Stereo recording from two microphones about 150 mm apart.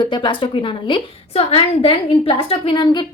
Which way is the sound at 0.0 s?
30° left (ahead or behind).